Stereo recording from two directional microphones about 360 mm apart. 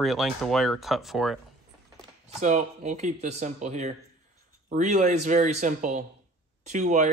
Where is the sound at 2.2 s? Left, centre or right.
Centre.